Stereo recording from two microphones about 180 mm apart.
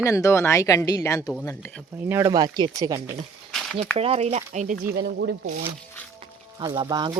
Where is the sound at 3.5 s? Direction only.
Centre (ahead or behind).